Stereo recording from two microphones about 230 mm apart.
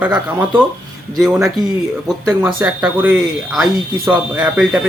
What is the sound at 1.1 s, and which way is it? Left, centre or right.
A man's voice, centre.